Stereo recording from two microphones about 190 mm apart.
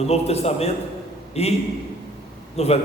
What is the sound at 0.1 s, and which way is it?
A man's voice, 35° left (ahead or behind).